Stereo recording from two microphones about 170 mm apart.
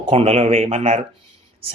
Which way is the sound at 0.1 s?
35° right (ahead or behind).